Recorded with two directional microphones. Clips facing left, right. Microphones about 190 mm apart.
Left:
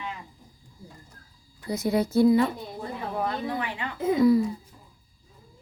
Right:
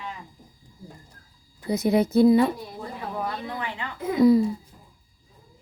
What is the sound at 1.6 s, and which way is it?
Speech, 20° right (ahead or behind).